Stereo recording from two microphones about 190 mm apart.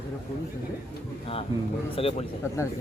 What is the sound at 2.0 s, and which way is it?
Speech, 30° left (ahead or behind).